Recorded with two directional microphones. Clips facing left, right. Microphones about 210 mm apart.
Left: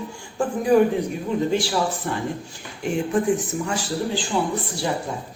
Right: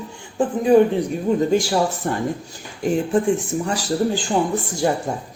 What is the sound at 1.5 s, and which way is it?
Speech, 45° right (ahead or behind).